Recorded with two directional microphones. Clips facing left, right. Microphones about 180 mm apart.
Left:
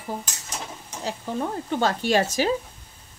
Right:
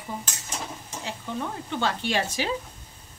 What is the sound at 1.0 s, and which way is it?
Speech, 40° left (ahead or behind).